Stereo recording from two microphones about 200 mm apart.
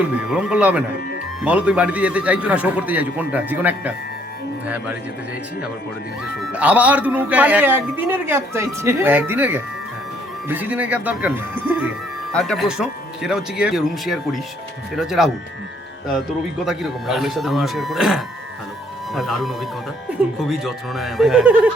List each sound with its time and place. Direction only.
0.0 s a man's voice: 5° right (ahead or behind)
6.2 s a man's voice: 5° right (ahead or behind)
12.3 s speech: 5° left (ahead or behind)
16.6 s speech: centre (ahead or behind)